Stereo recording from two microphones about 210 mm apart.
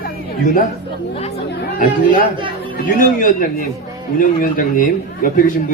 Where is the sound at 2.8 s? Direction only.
40° left (ahead or behind).